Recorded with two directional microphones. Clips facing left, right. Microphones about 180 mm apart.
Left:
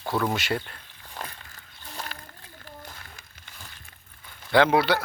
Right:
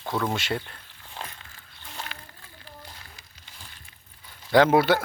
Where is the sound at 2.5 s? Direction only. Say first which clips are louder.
Left 2 dB; 50° left (ahead or behind).